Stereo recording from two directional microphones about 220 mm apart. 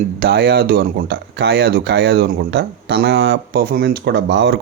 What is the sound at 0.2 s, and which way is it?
Speech, 45° right (ahead or behind).